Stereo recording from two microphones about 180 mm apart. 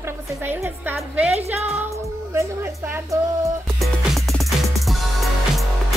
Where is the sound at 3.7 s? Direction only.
Centre (ahead or behind).